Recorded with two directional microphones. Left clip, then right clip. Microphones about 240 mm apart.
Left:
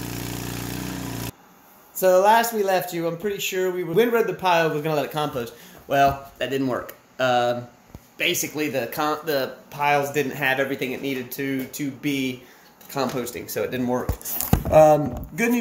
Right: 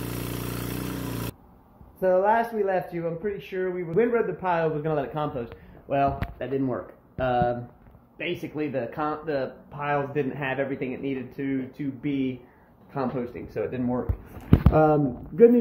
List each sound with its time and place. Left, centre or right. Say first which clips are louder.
0.0 s vehicle: left 1 dB; left
2.0 s speech: left 5 dB; centre